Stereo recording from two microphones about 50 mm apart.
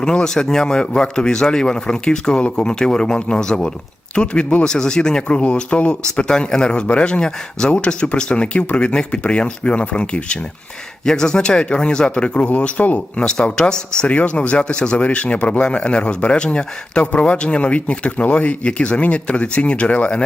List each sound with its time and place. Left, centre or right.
0.0 s speech: centre
11.0 s speech: centre; by 13.0 s left
13.1 s speech: centre